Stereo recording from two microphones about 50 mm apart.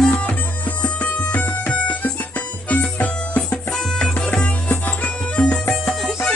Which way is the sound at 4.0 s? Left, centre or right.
Centre.